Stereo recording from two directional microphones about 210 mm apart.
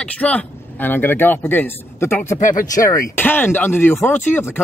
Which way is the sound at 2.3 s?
40° left (ahead or behind).